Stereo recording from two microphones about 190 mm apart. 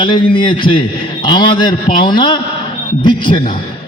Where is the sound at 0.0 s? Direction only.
25° left (ahead or behind).